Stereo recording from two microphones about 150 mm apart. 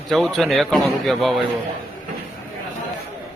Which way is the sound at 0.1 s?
5° left (ahead or behind).